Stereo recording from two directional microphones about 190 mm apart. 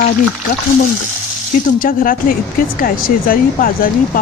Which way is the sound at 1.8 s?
50° left (ahead or behind).